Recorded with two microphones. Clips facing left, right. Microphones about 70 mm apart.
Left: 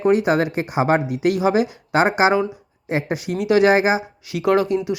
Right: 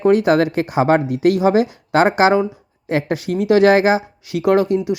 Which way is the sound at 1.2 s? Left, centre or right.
Left.